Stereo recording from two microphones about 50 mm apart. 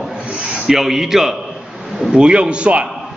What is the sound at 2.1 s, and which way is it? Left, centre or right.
Speech, centre.